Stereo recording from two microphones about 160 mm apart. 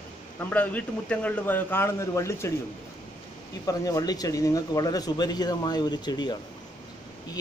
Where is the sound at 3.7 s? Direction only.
25° left (ahead or behind).